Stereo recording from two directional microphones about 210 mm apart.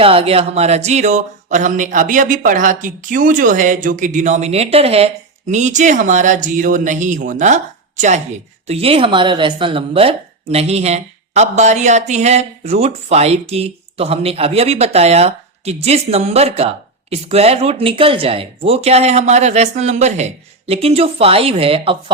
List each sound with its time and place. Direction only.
0.0 s speech: 25° right (ahead or behind)